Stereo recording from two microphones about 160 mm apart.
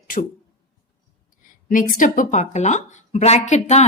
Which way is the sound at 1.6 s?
60° left (ahead or behind).